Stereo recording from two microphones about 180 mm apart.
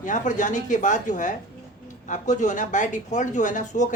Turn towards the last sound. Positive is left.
turn(degrees=45)  # may be behind; listen again after turning